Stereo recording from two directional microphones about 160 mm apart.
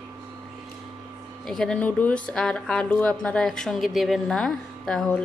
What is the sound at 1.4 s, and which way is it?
Speech, 5° left (ahead or behind).